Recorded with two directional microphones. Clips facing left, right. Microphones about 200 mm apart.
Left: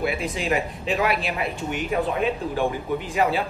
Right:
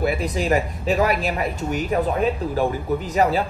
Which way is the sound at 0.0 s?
40° right (ahead or behind).